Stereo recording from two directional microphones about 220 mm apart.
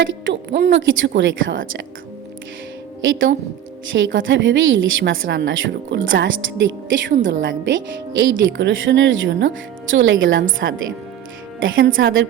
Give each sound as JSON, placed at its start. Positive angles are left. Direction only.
{"t": 0.0, "sound": "a woman's voice", "side_deg": -55}
{"t": 3.0, "sound": "a woman's voice", "side_deg": -60}
{"t": 10.6, "sound": "a woman's voice", "side_deg": -50}
{"t": 11.6, "sound": "a woman's voice", "side_deg": -60}